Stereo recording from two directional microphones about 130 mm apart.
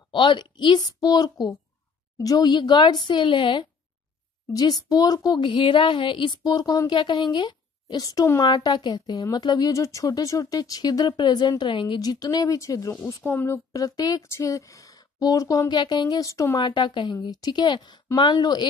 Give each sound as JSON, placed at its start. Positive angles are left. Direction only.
{"t": 0.1, "sound": "speech", "side_deg": 40}
{"t": 4.5, "sound": "speech", "side_deg": 30}